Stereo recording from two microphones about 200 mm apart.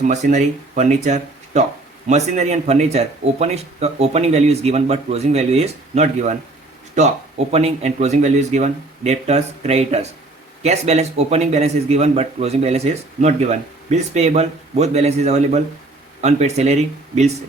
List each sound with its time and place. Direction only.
0.1 s a man's voice: 35° right (ahead or behind)